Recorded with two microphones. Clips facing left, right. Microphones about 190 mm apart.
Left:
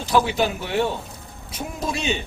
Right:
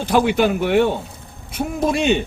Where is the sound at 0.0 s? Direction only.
55° right (ahead or behind).